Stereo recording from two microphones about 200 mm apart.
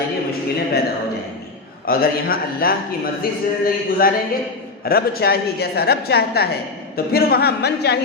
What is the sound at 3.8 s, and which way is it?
A woman's voice, 45° left (ahead or behind).